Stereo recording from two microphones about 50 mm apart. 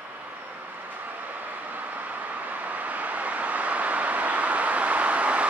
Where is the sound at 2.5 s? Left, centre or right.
Right.